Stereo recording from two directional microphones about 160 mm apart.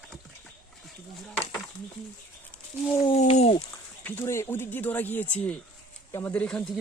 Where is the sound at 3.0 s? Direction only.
40° left (ahead or behind).